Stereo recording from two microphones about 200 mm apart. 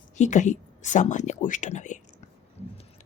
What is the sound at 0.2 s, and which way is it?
Speech, 35° left (ahead or behind).